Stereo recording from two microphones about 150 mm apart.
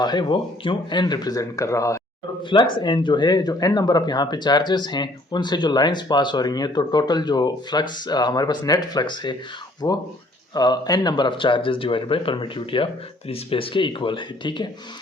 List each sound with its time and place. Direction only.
0.0 s speech: 30° left (ahead or behind)
2.4 s speech: 35° left (ahead or behind)